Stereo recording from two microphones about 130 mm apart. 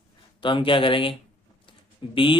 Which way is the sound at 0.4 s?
40° left (ahead or behind).